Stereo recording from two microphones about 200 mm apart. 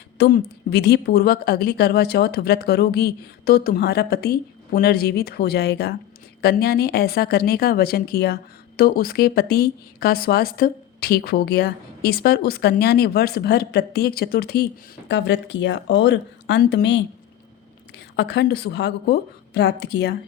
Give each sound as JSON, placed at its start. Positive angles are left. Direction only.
{"t": 0.2, "sound": "a woman's voice", "side_deg": 50}